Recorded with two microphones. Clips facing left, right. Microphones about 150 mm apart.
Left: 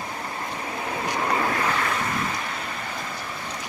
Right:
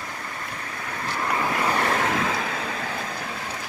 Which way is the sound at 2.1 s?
90° right.